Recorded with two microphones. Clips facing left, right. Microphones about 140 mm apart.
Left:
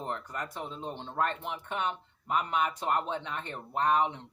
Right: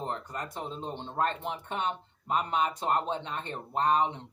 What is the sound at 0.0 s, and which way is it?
A man's voice, 30° right (ahead or behind).